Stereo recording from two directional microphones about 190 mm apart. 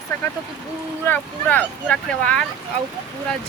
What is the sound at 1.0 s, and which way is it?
Speech, 10° left (ahead or behind).